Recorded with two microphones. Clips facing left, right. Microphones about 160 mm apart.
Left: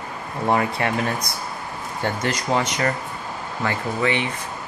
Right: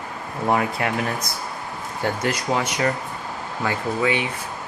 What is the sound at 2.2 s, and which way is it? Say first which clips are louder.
Speech: left 2 dB; 5° right (ahead or behind).